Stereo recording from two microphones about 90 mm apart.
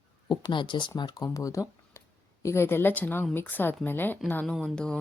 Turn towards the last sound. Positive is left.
turn(degrees=10)  # may be behind; listen again after turning